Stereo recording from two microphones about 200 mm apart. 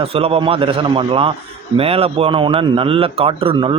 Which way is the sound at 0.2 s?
30° right (ahead or behind).